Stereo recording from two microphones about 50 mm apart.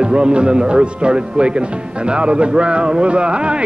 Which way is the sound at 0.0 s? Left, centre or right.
Centre.